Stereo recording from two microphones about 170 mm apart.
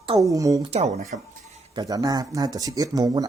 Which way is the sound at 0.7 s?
40° right (ahead or behind).